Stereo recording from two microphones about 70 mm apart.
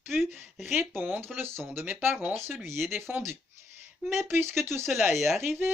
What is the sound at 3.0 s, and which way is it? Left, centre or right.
Speech, right.